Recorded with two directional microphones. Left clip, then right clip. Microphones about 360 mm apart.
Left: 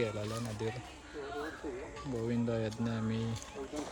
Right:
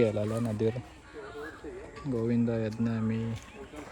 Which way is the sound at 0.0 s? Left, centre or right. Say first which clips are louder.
Right 8 dB; centre.